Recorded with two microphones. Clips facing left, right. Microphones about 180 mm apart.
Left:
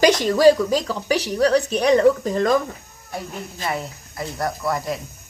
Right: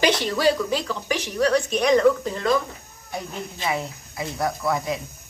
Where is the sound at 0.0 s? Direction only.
45° left (ahead or behind).